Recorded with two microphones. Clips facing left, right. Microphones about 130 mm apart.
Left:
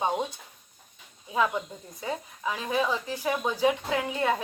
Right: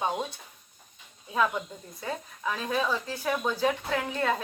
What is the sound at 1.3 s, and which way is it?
Speech, 10° left (ahead or behind).